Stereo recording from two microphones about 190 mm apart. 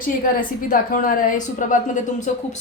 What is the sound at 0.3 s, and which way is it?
A woman's voice, 45° left (ahead or behind).